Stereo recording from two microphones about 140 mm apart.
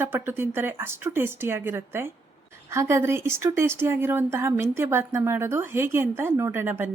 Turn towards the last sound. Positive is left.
turn(degrees=-15)  # may be behind; listen again after turning